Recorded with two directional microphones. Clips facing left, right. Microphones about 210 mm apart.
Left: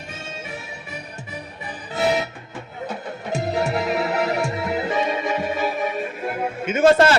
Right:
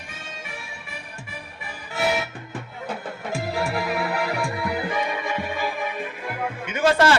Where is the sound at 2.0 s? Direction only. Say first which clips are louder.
Left 3 dB; 20° left (ahead or behind).